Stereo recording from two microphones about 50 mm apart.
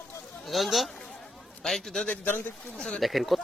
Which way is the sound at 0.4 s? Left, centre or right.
Centre.